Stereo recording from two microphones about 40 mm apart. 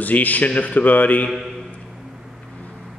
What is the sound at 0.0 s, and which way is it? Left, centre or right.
Speech, left.